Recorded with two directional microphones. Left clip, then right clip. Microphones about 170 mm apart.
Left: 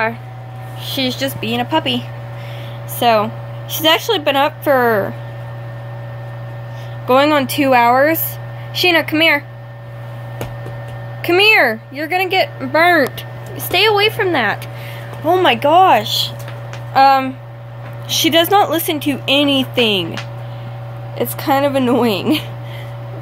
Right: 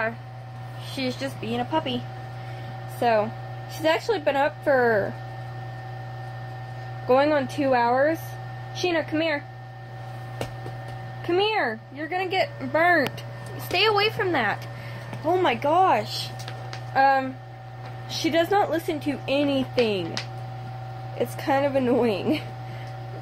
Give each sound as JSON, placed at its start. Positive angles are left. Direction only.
{"t": 0.8, "sound": "speech", "side_deg": 5}
{"t": 3.0, "sound": "a woman's voice", "side_deg": 10}
{"t": 7.1, "sound": "a woman's voice", "side_deg": 15}
{"t": 11.2, "sound": "speech", "side_deg": 20}
{"t": 12.0, "sound": "speech", "side_deg": 5}
{"t": 15.2, "sound": "a woman's voice", "side_deg": 5}
{"t": 21.2, "sound": "a woman's voice", "side_deg": 5}